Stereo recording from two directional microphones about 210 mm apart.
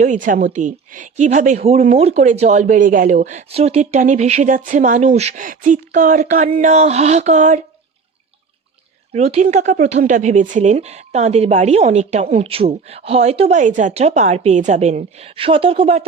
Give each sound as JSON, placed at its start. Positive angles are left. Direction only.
{"t": 0.0, "sound": "speech", "side_deg": -35}
{"t": 9.1, "sound": "speech", "side_deg": -30}